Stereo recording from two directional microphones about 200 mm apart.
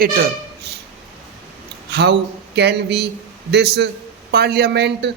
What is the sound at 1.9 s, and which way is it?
A man's voice, 55° right (ahead or behind).